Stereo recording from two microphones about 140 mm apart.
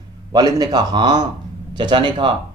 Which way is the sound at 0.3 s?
30° right (ahead or behind).